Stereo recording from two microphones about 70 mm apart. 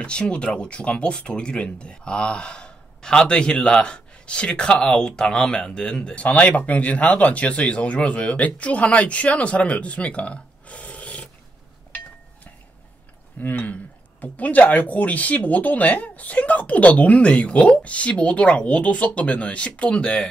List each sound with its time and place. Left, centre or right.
0.0 s speech: centre
13.4 s speech: left